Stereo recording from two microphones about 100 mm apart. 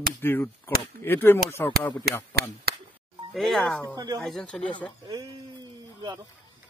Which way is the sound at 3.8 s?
35° right (ahead or behind).